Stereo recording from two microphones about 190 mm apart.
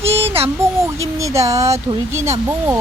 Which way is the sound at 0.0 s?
30° right (ahead or behind).